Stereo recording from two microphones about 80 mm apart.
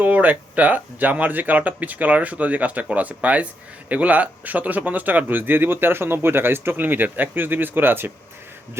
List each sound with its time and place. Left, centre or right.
0.0 s speech: right